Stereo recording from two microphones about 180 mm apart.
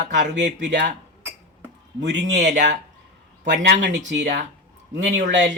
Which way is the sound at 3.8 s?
75° right (ahead or behind).